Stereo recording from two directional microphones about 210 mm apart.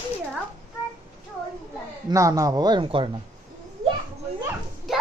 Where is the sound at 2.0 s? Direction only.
15° right (ahead or behind).